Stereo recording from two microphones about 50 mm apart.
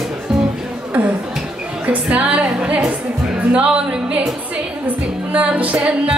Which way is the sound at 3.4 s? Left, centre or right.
Right.